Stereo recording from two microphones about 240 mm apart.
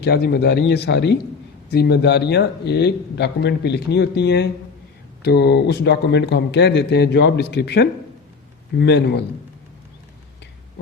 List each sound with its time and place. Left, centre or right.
0.0 s a man's voice: left